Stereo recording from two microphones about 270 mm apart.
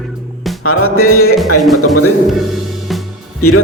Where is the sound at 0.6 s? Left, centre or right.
Left.